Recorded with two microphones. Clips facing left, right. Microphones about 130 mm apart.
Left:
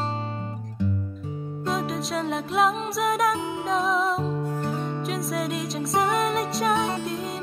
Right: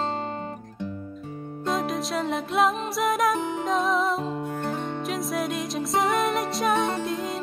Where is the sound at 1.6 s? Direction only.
Centre (ahead or behind).